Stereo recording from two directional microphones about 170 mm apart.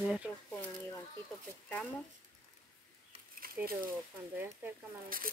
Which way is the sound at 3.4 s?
55° right (ahead or behind).